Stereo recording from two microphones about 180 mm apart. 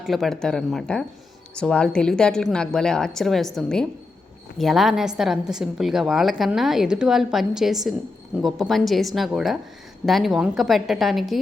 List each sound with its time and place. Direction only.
0.0 s a woman's voice: centre (ahead or behind)